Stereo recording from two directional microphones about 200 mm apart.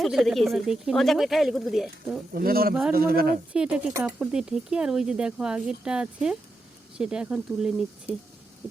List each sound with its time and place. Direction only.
0.0 s speech: centre (ahead or behind)
2.3 s speech: 50° right (ahead or behind)
3.5 s speech: 5° right (ahead or behind)